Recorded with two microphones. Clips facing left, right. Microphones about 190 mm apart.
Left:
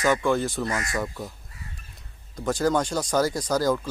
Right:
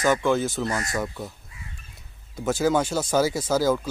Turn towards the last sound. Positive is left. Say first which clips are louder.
# right 1 dB
turn(degrees=-5)  # may be behind; listen again after turning